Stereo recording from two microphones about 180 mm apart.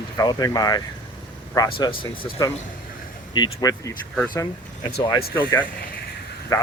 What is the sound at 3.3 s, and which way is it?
Speech, 25° left (ahead or behind).